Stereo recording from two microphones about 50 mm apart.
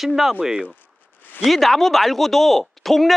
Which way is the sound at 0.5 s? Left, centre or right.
Centre.